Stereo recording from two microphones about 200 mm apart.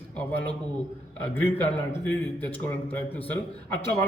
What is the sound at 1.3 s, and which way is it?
A man's voice, 10° left (ahead or behind).